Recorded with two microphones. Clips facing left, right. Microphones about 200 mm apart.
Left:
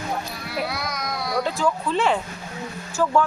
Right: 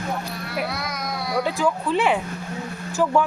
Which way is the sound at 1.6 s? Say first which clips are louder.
Right 1 dB; 15° right (ahead or behind).